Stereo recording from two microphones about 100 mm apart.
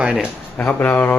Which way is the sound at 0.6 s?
20° left (ahead or behind).